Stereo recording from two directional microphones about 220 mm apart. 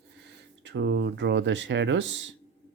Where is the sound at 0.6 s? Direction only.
50° right (ahead or behind).